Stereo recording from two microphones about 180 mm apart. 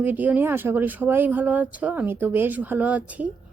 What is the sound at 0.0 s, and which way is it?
A woman's voice, 10° right (ahead or behind).